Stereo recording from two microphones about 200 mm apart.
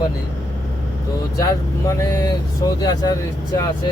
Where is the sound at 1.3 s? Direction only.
15° left (ahead or behind).